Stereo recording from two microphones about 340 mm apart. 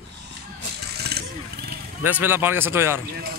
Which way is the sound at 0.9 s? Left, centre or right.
Right.